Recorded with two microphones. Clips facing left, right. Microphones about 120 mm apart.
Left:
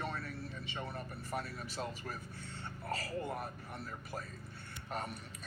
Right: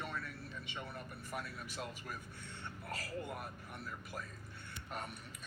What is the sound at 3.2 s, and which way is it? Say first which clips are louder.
A man's voice: left 4 dB; 35° left (ahead or behind).